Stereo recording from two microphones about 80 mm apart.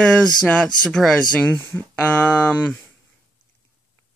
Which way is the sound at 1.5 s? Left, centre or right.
Left.